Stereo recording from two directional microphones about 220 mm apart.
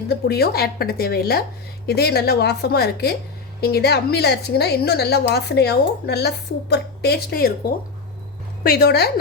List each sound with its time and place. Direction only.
0.1 s a woman's voice: 45° left (ahead or behind)
8.6 s a woman's voice: 45° left (ahead or behind)